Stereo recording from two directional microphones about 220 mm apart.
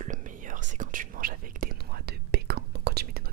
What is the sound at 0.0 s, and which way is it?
Whispering, 35° right (ahead or behind).